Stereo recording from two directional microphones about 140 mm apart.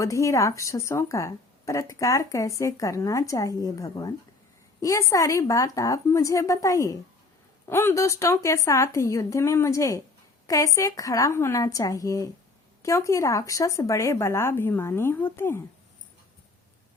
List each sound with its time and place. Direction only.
0.0 s speech: 20° left (ahead or behind)